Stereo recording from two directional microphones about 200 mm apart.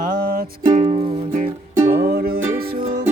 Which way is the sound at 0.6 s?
30° right (ahead or behind).